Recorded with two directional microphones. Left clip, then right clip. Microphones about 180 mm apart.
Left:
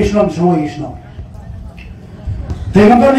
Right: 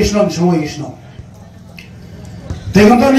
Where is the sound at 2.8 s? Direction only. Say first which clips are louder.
Left 1 dB; 20° left (ahead or behind).